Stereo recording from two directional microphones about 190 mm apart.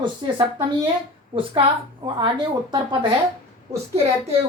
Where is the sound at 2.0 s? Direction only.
25° right (ahead or behind).